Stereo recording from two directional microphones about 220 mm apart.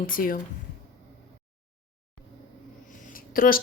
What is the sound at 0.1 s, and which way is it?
Speech, 40° left (ahead or behind).